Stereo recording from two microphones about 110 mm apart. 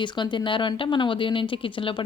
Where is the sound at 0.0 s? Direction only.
45° left (ahead or behind).